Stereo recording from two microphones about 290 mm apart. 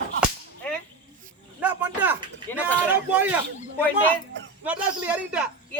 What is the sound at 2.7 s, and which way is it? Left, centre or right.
Speech, centre.